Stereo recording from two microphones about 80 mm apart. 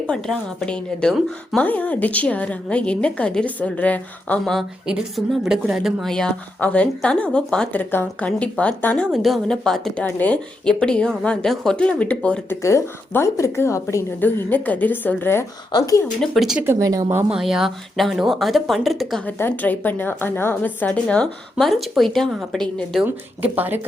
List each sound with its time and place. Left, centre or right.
0.1 s a woman's voice: centre
5.1 s speech: centre
6.1 s a woman's voice: centre
7.7 s a woman's voice: left
9.1 s speech: centre
10.0 s a woman's voice: centre
12.5 s a woman's voice: left
14.2 s a woman's voice: left
16.2 s speech: centre
16.8 s speech: right
17.2 s speech: centre
19.4 s a woman's voice: left
21.6 s speech: centre
23.0 s speech: right